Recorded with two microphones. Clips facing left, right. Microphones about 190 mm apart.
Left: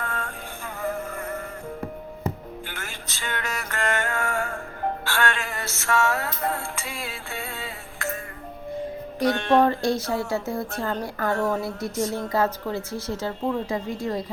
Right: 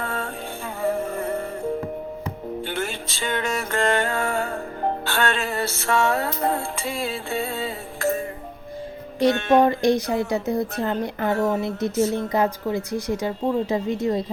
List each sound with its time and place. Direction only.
0.0 s music: 30° right (ahead or behind)
2.6 s music: 30° right (ahead or behind)
4.8 s music: 20° right (ahead or behind)
9.3 s speech: 5° right (ahead or behind); by 14.3 s 20° right (ahead or behind)